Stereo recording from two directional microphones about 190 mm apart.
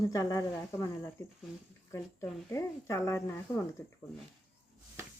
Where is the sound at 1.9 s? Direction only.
15° left (ahead or behind).